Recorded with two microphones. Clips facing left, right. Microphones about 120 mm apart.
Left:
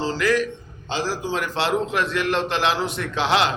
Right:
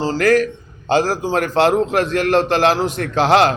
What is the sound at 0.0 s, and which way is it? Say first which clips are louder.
A man's voice: right 6 dB; 45° right (ahead or behind).